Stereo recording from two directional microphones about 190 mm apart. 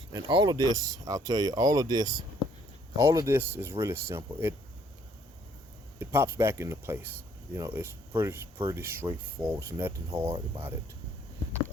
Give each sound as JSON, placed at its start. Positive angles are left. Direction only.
{"t": 0.1, "sound": "speech", "side_deg": -20}
{"t": 6.0, "sound": "speech", "side_deg": -10}